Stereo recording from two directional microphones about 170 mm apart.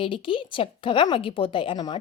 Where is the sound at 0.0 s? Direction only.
30° left (ahead or behind).